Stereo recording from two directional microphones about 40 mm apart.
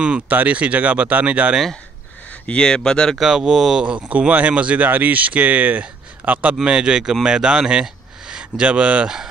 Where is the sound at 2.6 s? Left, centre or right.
Centre.